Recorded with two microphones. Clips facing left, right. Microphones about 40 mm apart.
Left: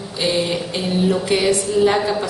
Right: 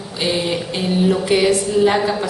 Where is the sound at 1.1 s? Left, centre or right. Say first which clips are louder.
Right 2 dB; centre.